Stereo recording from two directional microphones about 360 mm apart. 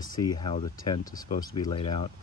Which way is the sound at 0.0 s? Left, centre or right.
Centre.